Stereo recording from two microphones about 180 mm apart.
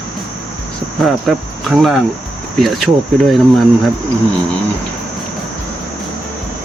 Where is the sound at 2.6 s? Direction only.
Centre (ahead or behind).